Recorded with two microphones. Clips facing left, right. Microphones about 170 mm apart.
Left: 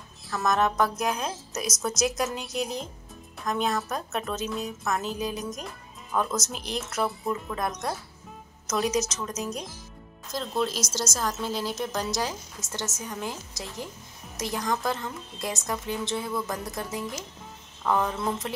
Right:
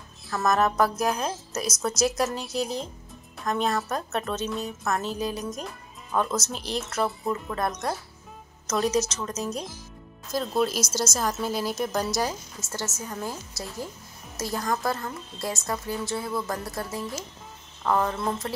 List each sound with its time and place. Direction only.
0.3 s a woman's voice: centre (ahead or behind)
12.6 s a woman's voice: 15° left (ahead or behind)
14.6 s speech: 5° right (ahead or behind)
15.3 s a woman's voice: 15° left (ahead or behind)
16.3 s speech: 5° right (ahead or behind)
16.6 s a woman's voice: 15° left (ahead or behind)
17.8 s speech: centre (ahead or behind)